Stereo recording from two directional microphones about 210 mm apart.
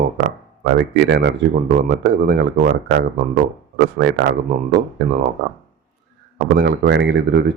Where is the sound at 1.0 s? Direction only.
45° right (ahead or behind).